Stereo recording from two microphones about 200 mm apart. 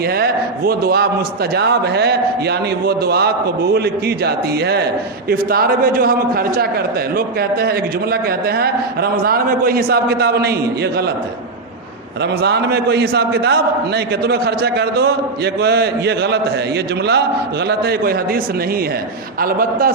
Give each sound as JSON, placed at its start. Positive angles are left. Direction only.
{"t": 0.0, "sound": "a man's voice", "side_deg": -50}
{"t": 12.2, "sound": "a man's voice", "side_deg": -55}